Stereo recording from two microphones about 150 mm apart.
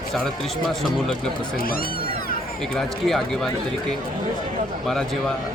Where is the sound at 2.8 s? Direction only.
Centre (ahead or behind).